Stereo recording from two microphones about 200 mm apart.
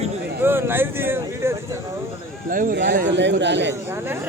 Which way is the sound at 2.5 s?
45° right (ahead or behind).